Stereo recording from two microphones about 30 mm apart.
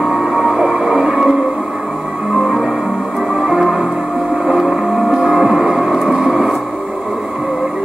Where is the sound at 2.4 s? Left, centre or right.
Centre.